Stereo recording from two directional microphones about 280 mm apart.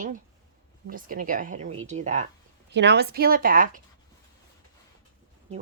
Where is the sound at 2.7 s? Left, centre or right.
Right.